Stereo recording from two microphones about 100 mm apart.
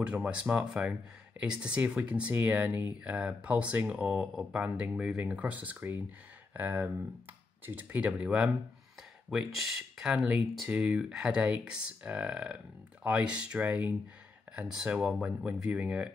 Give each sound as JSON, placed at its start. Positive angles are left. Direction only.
{"t": 0.0, "sound": "speech", "side_deg": -10}